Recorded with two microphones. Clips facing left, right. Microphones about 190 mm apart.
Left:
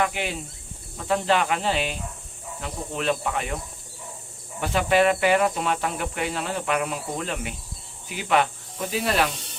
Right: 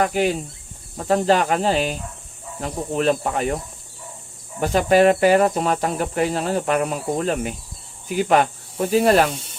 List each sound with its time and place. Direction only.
0.0 s speech: 40° right (ahead or behind)
4.6 s speech: 40° right (ahead or behind)